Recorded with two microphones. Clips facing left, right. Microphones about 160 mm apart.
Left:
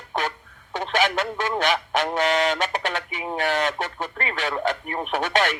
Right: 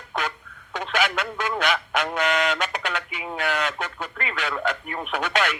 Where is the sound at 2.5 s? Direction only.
40° left (ahead or behind).